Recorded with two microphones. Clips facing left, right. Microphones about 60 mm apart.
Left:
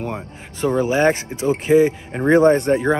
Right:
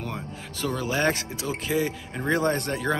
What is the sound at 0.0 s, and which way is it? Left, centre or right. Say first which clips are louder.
A man's voice: left 6 dB; left.